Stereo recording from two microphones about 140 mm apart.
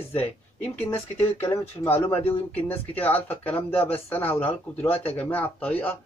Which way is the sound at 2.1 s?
45° left (ahead or behind).